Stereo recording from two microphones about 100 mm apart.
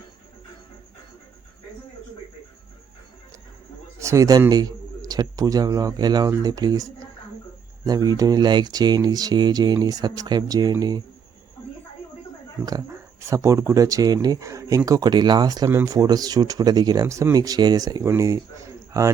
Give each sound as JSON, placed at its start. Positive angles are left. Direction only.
{"t": 4.0, "sound": "a man's voice", "side_deg": -30}
{"t": 12.6, "sound": "speech", "side_deg": -35}